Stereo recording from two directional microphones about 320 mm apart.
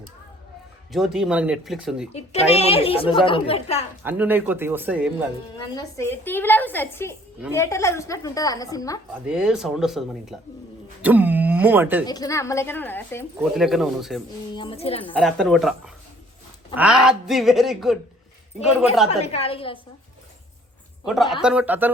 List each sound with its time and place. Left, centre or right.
0.9 s a woman's voice: centre
2.1 s a woman's voice: centre
4.0 s a woman's voice: centre
5.7 s a woman's voice: centre
9.2 s a woman's voice: centre
11.0 s a sound: centre
12.0 s a woman's voice: centre
14.5 s a woman's voice: centre
15.1 s a woman's voice: centre
16.7 s a woman's voice: centre
19.0 s a woman's voice: centre
21.0 s a woman's voice: centre